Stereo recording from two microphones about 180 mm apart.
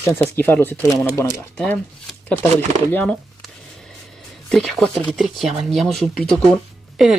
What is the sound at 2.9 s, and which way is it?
Speech, 5° left (ahead or behind).